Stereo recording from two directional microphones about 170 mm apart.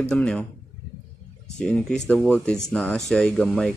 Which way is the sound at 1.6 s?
5° left (ahead or behind).